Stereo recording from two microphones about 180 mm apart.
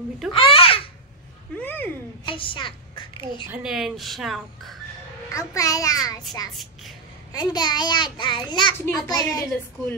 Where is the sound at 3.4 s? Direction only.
5° right (ahead or behind).